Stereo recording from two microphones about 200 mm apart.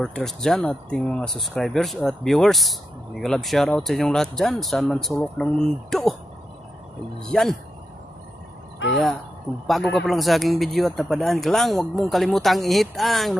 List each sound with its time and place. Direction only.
0.0 s speech: centre (ahead or behind)
7.2 s speech: centre (ahead or behind)
8.7 s a sound: 65° left (ahead or behind)
9.7 s speech: centre (ahead or behind)